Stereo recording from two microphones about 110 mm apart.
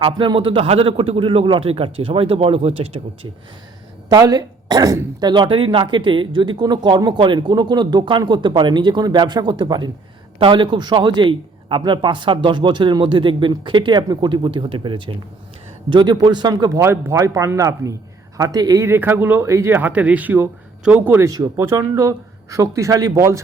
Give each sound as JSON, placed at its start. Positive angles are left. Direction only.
{"t": 0.0, "sound": "a man's voice", "side_deg": -45}
{"t": 4.1, "sound": "a woman's voice", "side_deg": -35}
{"t": 16.8, "sound": "speech", "side_deg": -25}
{"t": 18.9, "sound": "speech", "side_deg": -20}
{"t": 21.2, "sound": "speech", "side_deg": -35}